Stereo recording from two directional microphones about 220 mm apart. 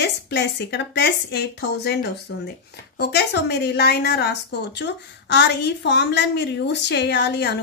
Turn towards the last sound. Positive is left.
turn(degrees=50)  # may be behind; listen again after turning